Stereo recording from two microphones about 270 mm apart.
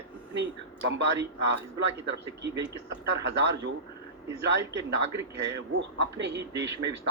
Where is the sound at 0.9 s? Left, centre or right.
Right.